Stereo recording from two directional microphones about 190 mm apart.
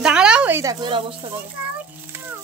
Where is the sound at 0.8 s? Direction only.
25° right (ahead or behind).